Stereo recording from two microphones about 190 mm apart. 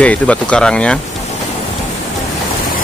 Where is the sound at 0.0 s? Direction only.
5° left (ahead or behind).